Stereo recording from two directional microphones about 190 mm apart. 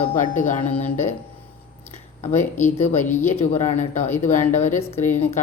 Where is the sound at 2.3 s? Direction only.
10° left (ahead or behind).